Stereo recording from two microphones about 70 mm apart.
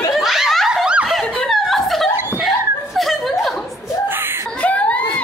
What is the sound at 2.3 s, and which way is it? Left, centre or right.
Chuckle, centre.